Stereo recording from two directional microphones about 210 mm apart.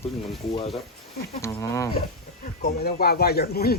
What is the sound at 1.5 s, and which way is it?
Speech, 15° left (ahead or behind).